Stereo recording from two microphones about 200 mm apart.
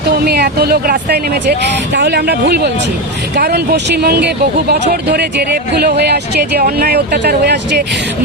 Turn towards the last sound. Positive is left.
turn(degrees=-55)  # may be behind; listen again after turning